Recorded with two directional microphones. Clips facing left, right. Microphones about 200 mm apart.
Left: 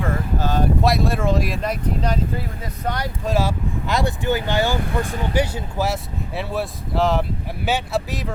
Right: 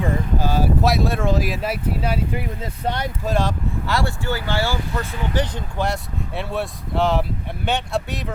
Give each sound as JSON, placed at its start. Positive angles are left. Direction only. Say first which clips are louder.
{"t": 0.0, "sound": "speech", "louder": "right 1 dB", "side_deg": -10}
{"t": 2.8, "sound": "speech", "louder": "right 1 dB", "side_deg": -25}
{"t": 3.2, "sound": "speech", "louder": "left 1 dB", "side_deg": 5}
{"t": 3.8, "sound": "speech", "louder": "left 3 dB", "side_deg": 20}